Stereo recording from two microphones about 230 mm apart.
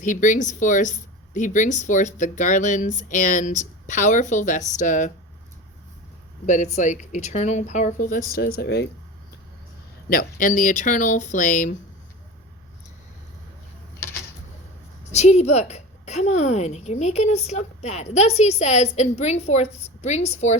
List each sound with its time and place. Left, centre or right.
0.0 s speech: left
6.4 s speech: left
10.1 s speech: left
15.1 s a woman's voice: left